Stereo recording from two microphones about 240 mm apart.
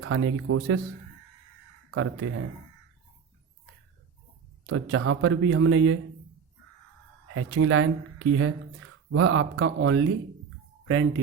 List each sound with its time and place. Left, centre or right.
0.0 s speech: right
2.0 s speech: right
4.6 s speech: right
7.3 s speech: right